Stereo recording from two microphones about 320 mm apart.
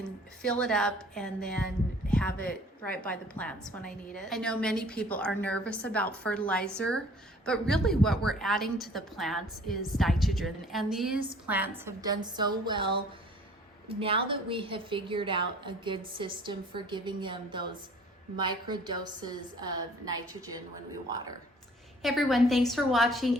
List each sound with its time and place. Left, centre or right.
0.0 s a woman's voice: centre
22.0 s a woman's voice: centre